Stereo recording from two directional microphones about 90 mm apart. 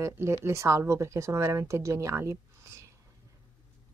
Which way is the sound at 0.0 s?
30° right (ahead or behind).